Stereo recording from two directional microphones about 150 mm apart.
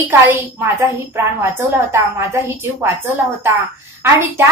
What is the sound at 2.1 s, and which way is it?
A woman's voice, 15° right (ahead or behind).